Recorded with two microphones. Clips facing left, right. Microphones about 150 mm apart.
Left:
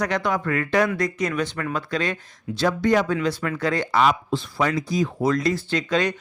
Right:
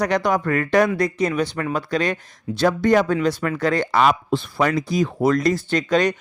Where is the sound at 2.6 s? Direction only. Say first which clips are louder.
Right 3 dB; 50° right (ahead or behind).